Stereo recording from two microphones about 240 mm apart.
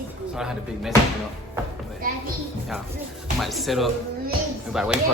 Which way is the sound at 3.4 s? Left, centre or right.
Centre.